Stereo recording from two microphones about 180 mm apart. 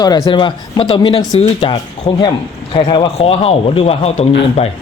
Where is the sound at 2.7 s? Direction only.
30° left (ahead or behind).